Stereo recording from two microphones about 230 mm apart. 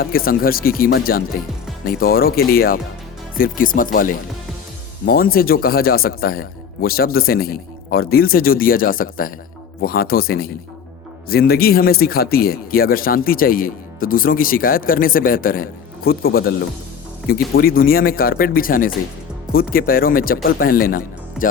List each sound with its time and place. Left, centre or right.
0.0 s speech: left